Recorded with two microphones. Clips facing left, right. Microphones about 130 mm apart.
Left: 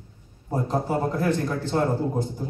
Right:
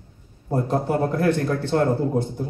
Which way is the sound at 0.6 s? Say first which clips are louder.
Right 2 dB; 65° right (ahead or behind).